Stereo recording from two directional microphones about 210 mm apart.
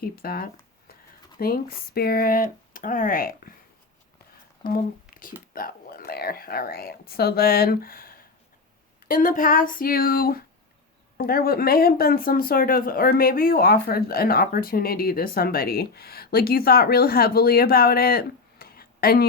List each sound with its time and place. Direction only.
0.0 s speech: 45° left (ahead or behind)
5.1 s speech: 40° left (ahead or behind)